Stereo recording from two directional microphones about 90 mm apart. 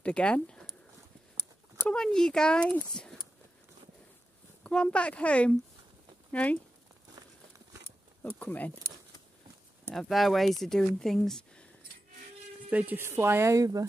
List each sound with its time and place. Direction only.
0.0 s speech: 10° left (ahead or behind)
1.9 s speech: 5° left (ahead or behind)
3.0 s a sound: 10° left (ahead or behind)
4.6 s speech: 10° left (ahead or behind)
8.2 s speech: 20° left (ahead or behind)
9.8 s speech: centre (ahead or behind)
12.6 s speech: 20° right (ahead or behind); by 13.8 s 40° right (ahead or behind)